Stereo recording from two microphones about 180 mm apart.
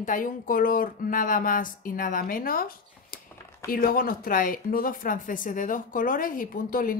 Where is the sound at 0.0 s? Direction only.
50° left (ahead or behind).